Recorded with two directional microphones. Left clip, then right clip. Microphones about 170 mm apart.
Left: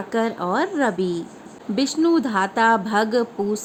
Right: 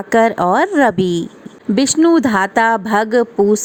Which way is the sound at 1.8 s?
40° right (ahead or behind).